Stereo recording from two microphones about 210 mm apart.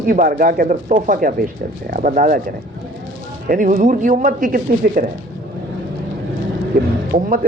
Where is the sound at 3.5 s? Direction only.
40° right (ahead or behind).